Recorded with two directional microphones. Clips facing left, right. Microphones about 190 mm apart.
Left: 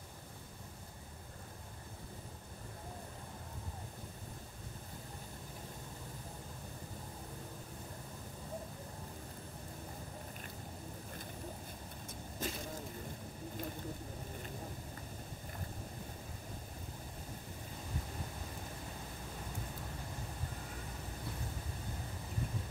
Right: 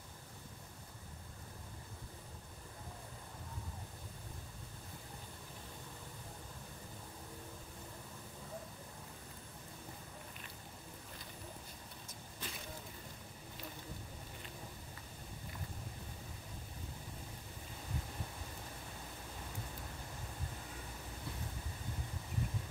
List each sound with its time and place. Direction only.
12.4 s vehicle: 45° left (ahead or behind)